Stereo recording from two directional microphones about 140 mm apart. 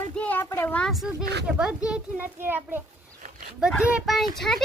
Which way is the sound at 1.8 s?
10° right (ahead or behind).